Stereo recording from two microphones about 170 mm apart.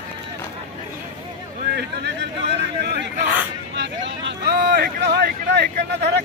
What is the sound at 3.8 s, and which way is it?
Vehicle, 80° right.